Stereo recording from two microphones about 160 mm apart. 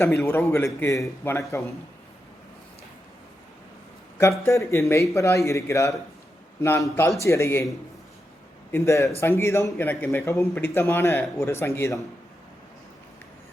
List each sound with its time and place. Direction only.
0.0 s a man's voice: 15° left (ahead or behind)
4.2 s a man's voice: 20° left (ahead or behind)
8.7 s a man's voice: 20° left (ahead or behind)